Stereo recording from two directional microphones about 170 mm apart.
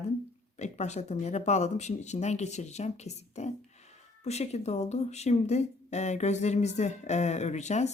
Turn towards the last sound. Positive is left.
turn(degrees=40)  # may be behind; listen again after turning